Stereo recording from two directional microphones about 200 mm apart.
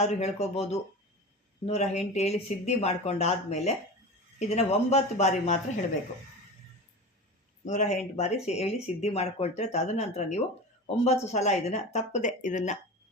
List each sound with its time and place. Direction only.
0.0 s speech: 35° left (ahead or behind)
7.6 s speech: 35° left (ahead or behind)